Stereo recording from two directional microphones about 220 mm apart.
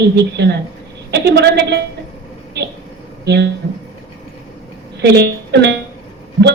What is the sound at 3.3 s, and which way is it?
Speech, 50° right (ahead or behind).